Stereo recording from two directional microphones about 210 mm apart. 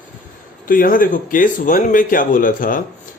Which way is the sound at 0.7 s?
40° left (ahead or behind).